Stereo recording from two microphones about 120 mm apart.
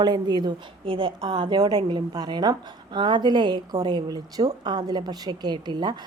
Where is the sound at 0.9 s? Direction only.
50° right (ahead or behind).